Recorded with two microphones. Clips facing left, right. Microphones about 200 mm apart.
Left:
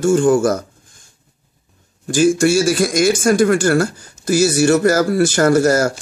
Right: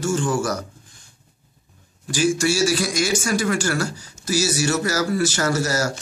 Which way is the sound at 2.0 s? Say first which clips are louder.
Left 7 dB; 50° left (ahead or behind).